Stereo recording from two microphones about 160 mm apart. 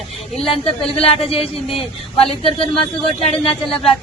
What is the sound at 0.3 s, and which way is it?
Speech, 40° left (ahead or behind).